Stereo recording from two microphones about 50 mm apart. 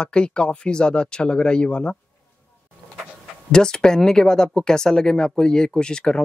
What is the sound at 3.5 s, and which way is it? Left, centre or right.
Speech, centre.